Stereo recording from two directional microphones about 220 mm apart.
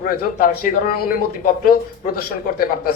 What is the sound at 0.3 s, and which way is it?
Speech, 40° left (ahead or behind).